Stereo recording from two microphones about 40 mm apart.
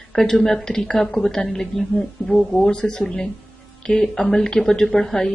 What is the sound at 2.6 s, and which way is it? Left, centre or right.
Speech, left.